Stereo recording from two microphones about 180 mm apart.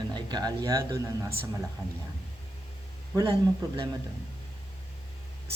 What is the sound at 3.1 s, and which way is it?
Speech, 25° right (ahead or behind).